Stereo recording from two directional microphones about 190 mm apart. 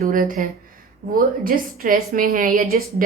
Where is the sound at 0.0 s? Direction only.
45° right (ahead or behind).